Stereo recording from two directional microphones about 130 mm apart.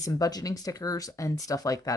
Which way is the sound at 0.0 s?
30° left (ahead or behind).